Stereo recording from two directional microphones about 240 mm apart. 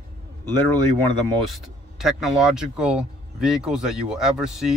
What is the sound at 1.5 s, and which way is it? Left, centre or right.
Speech, centre.